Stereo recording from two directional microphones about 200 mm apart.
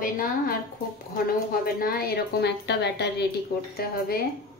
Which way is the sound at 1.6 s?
50° left (ahead or behind).